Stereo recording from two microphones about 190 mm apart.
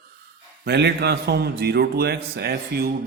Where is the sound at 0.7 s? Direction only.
60° right (ahead or behind).